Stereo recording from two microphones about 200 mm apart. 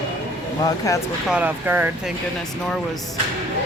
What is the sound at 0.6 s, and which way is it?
Speech, 15° left (ahead or behind).